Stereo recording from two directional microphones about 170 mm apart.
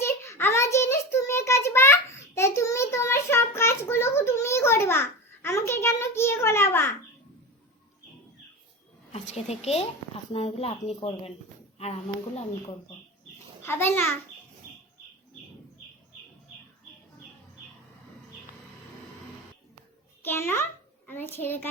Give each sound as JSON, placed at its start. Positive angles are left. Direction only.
{"t": 0.0, "sound": "child singing", "side_deg": 15}
{"t": 9.1, "sound": "a woman's voice", "side_deg": 40}
{"t": 13.6, "sound": "a child's voice", "side_deg": 15}
{"t": 20.2, "sound": "babbling", "side_deg": 10}
{"t": 21.1, "sound": "a sound", "side_deg": 10}